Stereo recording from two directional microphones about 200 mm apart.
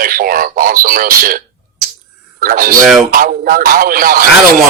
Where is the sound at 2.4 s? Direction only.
45° right (ahead or behind).